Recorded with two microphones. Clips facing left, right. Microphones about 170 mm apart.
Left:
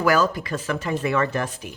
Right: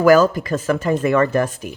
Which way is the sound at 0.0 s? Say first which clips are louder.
Right 8 dB; 45° right (ahead or behind).